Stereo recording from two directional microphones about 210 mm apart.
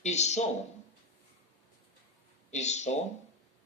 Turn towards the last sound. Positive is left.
turn(degrees=35)  # may be behind; listen again after turning